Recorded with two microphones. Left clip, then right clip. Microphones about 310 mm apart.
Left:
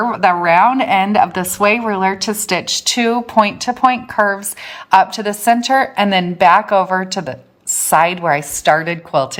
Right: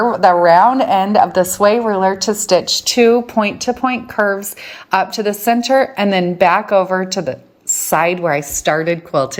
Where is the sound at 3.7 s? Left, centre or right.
Left.